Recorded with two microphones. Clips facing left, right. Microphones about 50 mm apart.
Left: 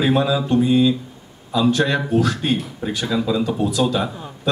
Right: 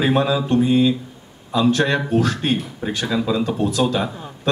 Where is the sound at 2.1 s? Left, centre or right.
Right.